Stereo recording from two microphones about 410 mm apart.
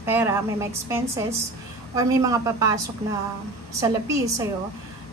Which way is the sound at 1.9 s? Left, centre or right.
Centre.